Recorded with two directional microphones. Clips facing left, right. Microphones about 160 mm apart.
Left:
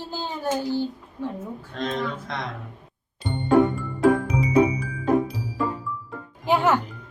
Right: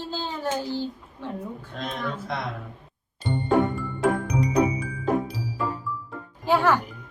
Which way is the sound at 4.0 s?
Centre (ahead or behind).